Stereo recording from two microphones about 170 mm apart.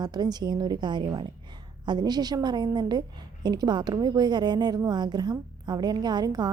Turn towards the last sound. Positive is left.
turn(degrees=-25)  # may be behind; listen again after turning